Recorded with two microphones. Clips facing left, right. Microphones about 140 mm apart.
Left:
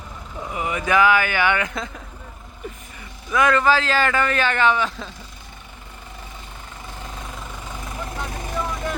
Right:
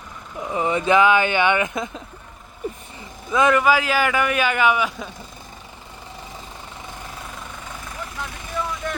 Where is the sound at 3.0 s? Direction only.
20° right (ahead or behind).